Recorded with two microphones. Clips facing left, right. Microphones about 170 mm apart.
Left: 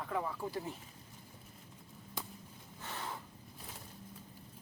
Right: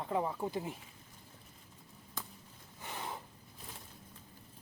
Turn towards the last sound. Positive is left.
turn(degrees=-15)  # may be behind; listen again after turning